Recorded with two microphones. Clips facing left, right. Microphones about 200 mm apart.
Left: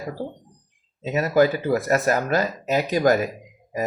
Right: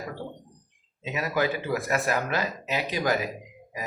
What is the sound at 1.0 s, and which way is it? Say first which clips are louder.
Speech: left 8 dB; 40° left (ahead or behind).